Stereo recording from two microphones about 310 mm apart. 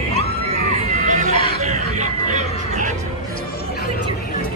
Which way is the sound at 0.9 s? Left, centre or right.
Right.